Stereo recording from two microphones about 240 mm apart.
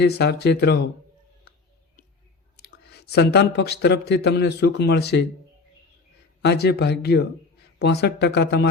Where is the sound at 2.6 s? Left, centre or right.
Left.